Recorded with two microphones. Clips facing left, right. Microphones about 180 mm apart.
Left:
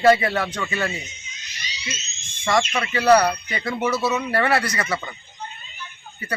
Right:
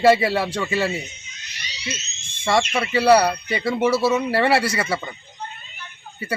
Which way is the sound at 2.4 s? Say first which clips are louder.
Right 1 dB; 30° right (ahead or behind).